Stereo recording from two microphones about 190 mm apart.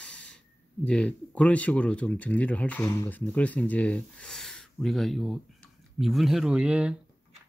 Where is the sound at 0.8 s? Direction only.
5° left (ahead or behind).